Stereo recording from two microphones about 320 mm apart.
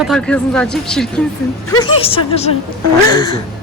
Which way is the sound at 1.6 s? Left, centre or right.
Centre.